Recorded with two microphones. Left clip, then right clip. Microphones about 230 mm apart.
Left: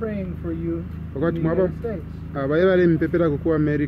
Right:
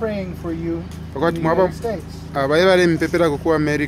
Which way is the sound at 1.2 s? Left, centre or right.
Centre.